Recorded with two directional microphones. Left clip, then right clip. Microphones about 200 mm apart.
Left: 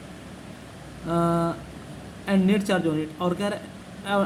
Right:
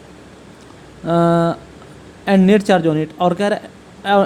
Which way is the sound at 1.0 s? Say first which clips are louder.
Right 9 dB; 45° right (ahead or behind).